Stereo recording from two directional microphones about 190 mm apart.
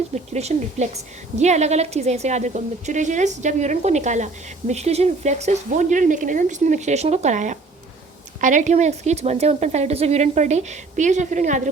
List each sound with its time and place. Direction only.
0.1 s speech: 35° right (ahead or behind)